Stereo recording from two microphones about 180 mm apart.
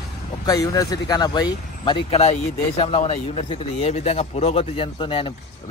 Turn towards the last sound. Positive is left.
turn(degrees=30)  # may be behind; listen again after turning